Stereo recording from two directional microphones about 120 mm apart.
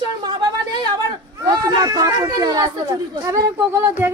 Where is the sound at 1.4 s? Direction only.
35° right (ahead or behind).